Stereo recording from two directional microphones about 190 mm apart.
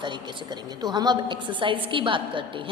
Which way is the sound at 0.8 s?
20° right (ahead or behind).